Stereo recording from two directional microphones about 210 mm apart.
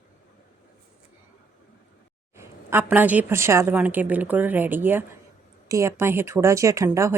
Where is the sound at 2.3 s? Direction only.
10° right (ahead or behind).